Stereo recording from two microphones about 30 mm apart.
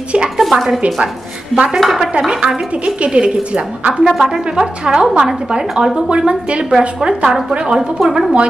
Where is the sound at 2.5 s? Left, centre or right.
Right.